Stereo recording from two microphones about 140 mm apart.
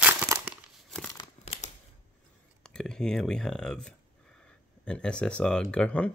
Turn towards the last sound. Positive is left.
turn(degrees=10)  # may be behind; listen again after turning